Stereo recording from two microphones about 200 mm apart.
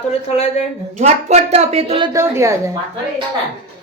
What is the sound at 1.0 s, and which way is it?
A woman's voice, 35° right (ahead or behind).